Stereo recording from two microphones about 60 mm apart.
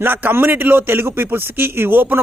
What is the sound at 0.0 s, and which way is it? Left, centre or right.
A man's voice, right.